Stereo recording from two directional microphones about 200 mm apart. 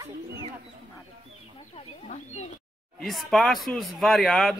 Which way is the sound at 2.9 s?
Centre (ahead or behind).